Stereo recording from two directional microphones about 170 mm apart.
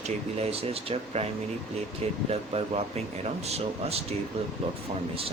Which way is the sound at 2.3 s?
35° right (ahead or behind).